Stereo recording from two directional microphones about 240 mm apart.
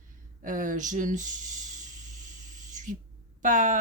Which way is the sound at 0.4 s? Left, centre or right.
Right.